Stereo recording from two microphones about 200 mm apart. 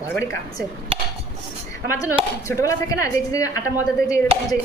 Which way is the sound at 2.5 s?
15° left (ahead or behind).